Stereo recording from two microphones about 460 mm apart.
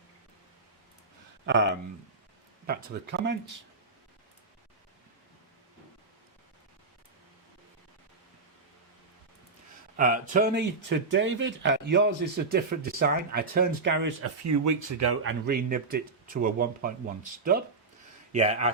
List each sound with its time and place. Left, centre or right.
1.5 s speech: right
10.0 s speech: centre
14.2 s speech: right
18.3 s speech: centre